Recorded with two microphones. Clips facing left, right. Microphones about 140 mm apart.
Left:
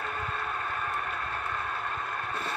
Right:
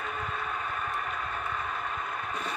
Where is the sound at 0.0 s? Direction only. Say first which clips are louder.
Even; centre (ahead or behind).